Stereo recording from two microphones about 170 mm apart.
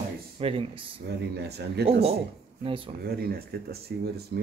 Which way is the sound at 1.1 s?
80° right.